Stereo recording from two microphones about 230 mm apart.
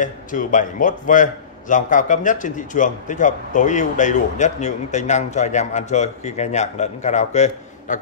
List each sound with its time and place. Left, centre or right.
0.0 s speech: left